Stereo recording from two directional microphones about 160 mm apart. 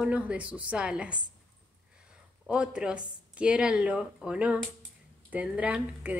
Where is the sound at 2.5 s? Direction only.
5° right (ahead or behind).